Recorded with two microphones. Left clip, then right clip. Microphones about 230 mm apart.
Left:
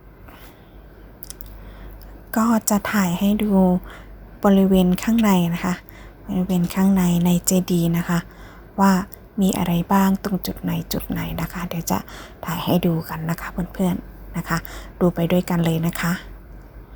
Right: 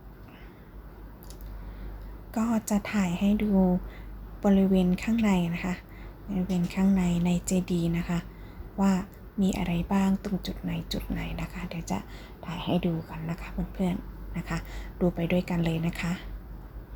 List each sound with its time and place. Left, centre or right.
2.3 s a woman's voice: left